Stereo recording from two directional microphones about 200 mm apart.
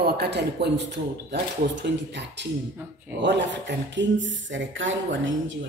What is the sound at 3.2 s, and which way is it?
Speech, 60° right (ahead or behind).